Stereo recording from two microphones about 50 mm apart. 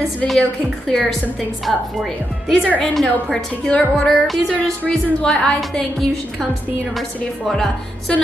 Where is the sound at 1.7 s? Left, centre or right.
Centre.